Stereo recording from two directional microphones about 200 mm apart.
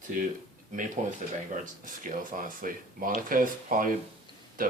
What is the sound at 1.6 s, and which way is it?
Speech, 40° right (ahead or behind).